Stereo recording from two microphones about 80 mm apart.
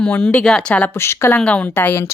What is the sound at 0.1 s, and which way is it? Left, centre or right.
Speech, left.